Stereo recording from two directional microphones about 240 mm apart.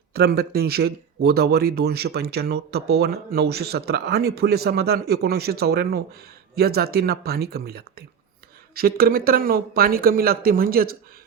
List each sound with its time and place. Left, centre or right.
0.1 s speech: right